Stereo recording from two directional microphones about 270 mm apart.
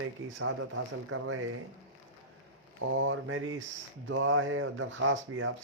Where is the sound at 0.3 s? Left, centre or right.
Right.